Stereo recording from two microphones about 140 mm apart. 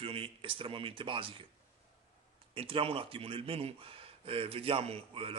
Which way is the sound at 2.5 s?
40° right (ahead or behind).